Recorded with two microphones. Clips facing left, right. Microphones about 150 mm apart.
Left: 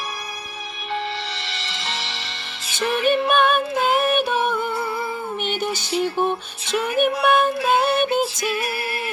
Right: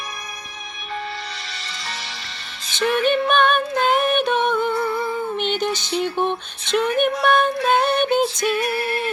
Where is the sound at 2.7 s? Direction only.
5° left (ahead or behind).